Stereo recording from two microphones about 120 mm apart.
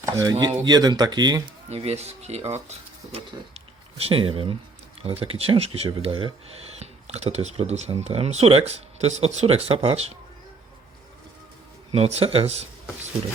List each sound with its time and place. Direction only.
0.0 s speech: 30° right (ahead or behind)
1.7 s speech: 65° right (ahead or behind)
3.9 s speech: 50° right (ahead or behind)
11.9 s speech: 60° right (ahead or behind)